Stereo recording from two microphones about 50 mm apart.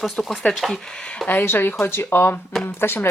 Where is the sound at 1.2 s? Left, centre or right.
Left.